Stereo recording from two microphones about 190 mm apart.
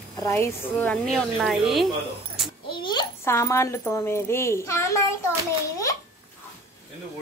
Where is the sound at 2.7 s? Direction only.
25° left (ahead or behind).